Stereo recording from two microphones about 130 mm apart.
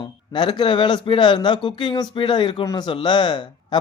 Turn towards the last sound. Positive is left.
turn(degrees=35)  # may be behind; listen again after turning